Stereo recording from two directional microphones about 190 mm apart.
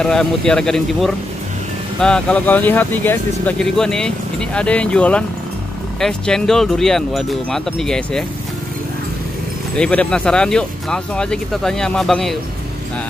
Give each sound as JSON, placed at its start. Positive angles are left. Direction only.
{"t": 0.0, "sound": "speech", "side_deg": 5}
{"t": 9.8, "sound": "speech", "side_deg": 5}